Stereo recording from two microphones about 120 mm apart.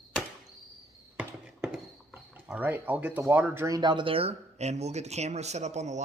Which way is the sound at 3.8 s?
40° right (ahead or behind).